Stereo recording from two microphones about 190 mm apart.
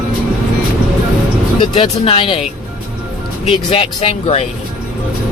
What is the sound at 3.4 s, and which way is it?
Speech, 30° left (ahead or behind).